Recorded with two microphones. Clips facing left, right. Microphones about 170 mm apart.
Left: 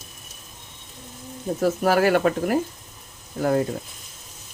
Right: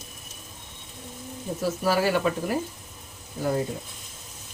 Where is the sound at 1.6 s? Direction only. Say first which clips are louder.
Left 5 dB; 55° left (ahead or behind).